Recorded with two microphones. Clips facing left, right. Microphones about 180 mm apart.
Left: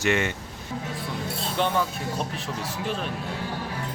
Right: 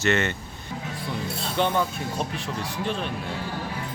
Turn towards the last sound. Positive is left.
turn(degrees=5)  # may be behind; listen again after turning